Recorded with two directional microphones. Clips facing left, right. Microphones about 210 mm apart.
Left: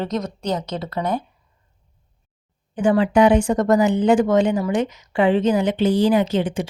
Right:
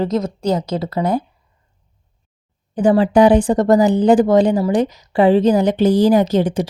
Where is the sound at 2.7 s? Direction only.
35° right (ahead or behind).